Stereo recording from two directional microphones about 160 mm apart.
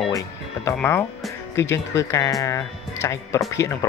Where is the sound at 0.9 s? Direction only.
15° left (ahead or behind).